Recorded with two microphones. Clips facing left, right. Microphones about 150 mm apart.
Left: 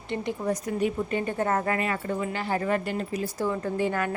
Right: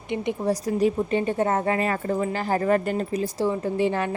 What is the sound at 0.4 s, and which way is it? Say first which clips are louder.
Speech: right 5 dB; 35° right (ahead or behind).